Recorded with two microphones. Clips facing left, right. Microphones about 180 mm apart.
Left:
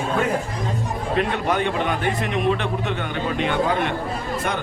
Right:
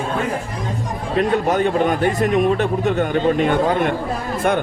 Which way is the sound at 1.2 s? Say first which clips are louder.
Right 6 dB; 40° right (ahead or behind).